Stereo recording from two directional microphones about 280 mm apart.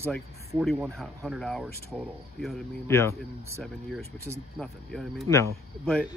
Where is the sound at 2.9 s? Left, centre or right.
Centre.